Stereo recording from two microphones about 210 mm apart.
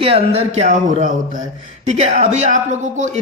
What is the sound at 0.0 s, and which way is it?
Speech, 30° right (ahead or behind).